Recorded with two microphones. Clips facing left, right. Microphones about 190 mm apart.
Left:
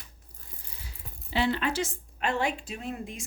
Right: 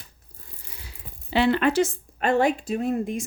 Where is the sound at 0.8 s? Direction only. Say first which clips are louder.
Right 2 dB; 70° right (ahead or behind).